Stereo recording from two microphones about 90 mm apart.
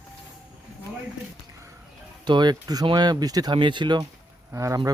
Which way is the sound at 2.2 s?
55° right (ahead or behind).